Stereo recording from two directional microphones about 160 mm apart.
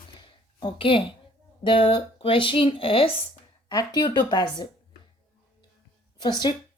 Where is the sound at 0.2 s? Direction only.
30° left (ahead or behind).